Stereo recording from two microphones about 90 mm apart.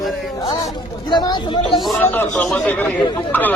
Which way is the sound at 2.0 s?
20° left (ahead or behind).